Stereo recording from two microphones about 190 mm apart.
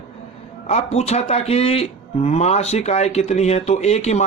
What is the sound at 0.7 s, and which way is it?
A man's voice, 35° left (ahead or behind).